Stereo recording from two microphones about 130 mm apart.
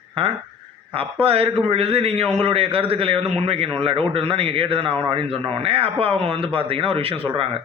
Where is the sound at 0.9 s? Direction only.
45° right (ahead or behind).